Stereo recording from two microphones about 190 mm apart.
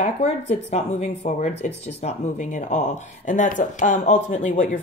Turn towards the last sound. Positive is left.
turn(degrees=40)  # may be behind; listen again after turning